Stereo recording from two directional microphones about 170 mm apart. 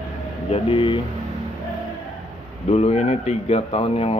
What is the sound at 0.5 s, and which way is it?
Speech, 30° left (ahead or behind).